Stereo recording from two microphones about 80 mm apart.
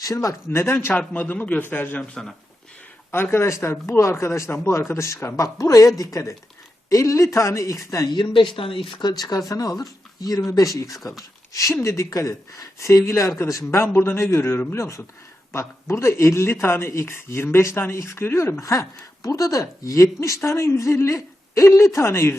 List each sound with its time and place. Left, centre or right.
0.0 s speech: left
3.1 s speech: left
8.1 s speech: left
9.5 s speech: left
11.2 s a sound: left
11.7 s speech: left
18.6 s speech: left